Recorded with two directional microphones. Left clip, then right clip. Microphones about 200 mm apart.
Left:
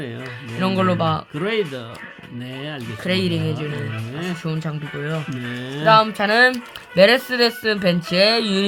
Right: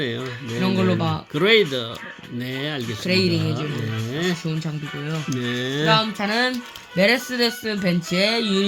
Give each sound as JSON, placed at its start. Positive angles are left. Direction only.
{"t": 0.6, "sound": "speech", "side_deg": 30}
{"t": 1.4, "sound": "speech", "side_deg": -20}
{"t": 3.1, "sound": "speech", "side_deg": 25}
{"t": 4.4, "sound": "speech", "side_deg": 25}
{"t": 5.5, "sound": "speech", "side_deg": -20}
{"t": 5.8, "sound": "speech", "side_deg": 25}